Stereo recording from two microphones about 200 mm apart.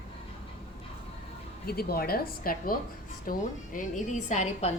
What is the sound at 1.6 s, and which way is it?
A woman's voice, 50° left (ahead or behind).